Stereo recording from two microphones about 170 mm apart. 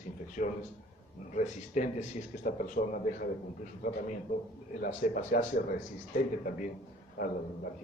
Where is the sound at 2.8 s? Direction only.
55° left (ahead or behind).